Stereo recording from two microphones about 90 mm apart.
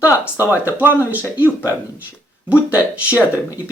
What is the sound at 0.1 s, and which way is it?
Speech, 35° left (ahead or behind).